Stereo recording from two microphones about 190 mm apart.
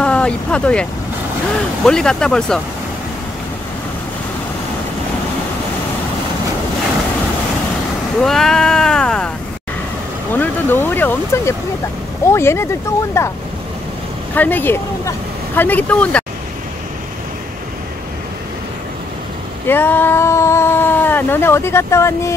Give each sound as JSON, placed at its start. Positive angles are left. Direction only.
{"t": 0.0, "sound": "speech", "side_deg": 5}
{"t": 1.9, "sound": "speech", "side_deg": 5}
{"t": 8.2, "sound": "speech", "side_deg": 0}
{"t": 10.3, "sound": "speech", "side_deg": 10}
{"t": 19.7, "sound": "speech", "side_deg": 10}